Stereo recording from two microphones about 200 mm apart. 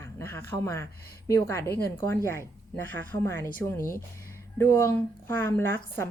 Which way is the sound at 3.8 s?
45° left (ahead or behind).